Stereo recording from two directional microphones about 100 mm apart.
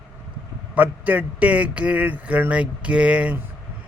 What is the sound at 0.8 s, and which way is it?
Speech, 15° right (ahead or behind).